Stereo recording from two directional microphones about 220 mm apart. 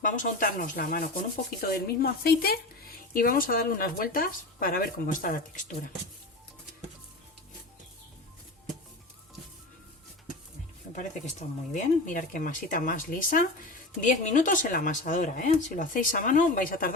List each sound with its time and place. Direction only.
0.0 s speech: 35° left (ahead or behind)
10.9 s speech: 35° left (ahead or behind)